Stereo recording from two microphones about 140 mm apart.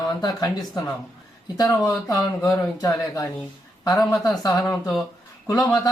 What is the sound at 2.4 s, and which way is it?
A man's voice, 25° left (ahead or behind).